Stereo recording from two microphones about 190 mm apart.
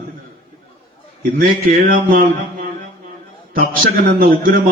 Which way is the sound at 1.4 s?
50° right (ahead or behind).